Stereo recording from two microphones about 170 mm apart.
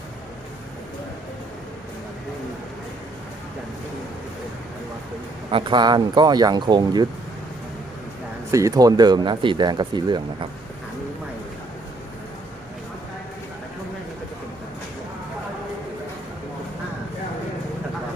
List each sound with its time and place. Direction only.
5.5 s speech: 30° right (ahead or behind)
8.4 s speech: 20° right (ahead or behind)